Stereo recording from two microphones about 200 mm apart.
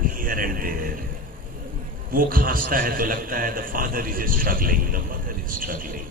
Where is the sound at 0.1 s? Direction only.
45° right (ahead or behind).